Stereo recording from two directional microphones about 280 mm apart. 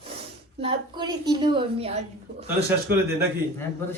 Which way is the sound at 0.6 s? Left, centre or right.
Centre.